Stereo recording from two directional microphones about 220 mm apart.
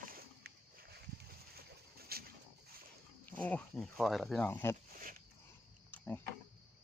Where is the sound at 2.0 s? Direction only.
45° right (ahead or behind).